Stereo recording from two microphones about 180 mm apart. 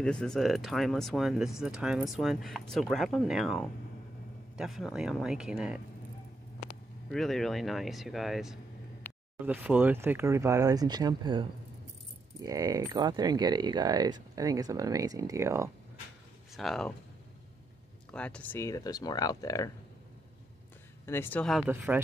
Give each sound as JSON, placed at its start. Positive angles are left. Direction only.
{"t": 0.0, "sound": "speech", "side_deg": 5}
{"t": 7.1, "sound": "speech", "side_deg": 0}
{"t": 16.5, "sound": "speech", "side_deg": 0}
{"t": 18.1, "sound": "speech", "side_deg": 5}
{"t": 21.0, "sound": "speech", "side_deg": 10}
{"t": 21.6, "sound": "speech", "side_deg": -10}